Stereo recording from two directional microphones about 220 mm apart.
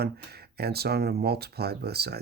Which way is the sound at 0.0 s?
45° right (ahead or behind).